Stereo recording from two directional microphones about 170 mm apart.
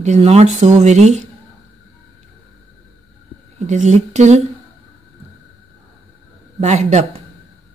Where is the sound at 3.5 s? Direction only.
45° right (ahead or behind).